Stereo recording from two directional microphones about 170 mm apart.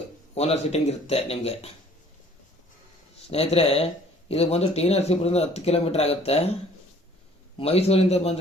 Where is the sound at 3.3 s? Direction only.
35° left (ahead or behind).